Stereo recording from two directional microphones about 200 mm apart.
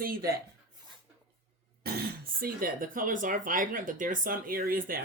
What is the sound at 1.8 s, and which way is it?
Speech, 50° right (ahead or behind).